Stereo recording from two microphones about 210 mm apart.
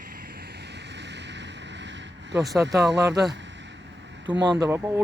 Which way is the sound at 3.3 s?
60° right (ahead or behind).